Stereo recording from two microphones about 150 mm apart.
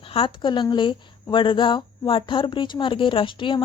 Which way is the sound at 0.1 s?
35° left (ahead or behind).